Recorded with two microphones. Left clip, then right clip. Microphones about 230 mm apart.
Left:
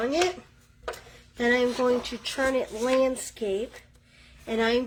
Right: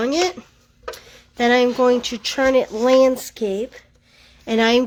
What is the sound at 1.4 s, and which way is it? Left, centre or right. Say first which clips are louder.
Speech: right 8 dB; right.